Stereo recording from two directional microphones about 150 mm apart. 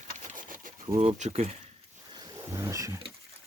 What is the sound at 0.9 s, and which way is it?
Speech, 45° right (ahead or behind).